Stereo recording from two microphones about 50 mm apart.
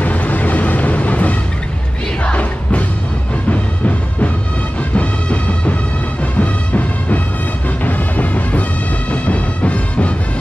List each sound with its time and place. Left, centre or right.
0.0 s music: left